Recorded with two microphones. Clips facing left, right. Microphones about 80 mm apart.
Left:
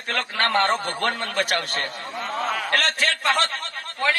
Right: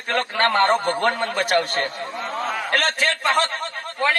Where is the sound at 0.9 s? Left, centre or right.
Right.